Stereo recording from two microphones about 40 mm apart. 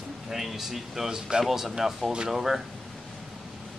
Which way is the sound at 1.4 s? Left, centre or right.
Centre.